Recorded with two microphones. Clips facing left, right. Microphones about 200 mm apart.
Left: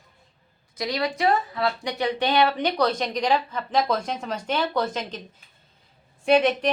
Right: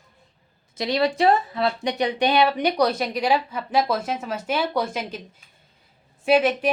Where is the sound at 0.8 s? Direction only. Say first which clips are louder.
Right 5 dB; 25° right (ahead or behind); by 5.2 s 10° right (ahead or behind).